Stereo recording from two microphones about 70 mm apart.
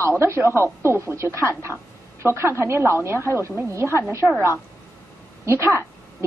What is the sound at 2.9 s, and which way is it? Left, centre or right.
Speech, right.